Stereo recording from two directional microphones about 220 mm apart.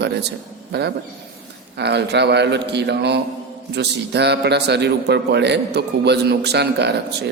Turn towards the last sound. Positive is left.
turn(degrees=-50)  # may be behind; listen again after turning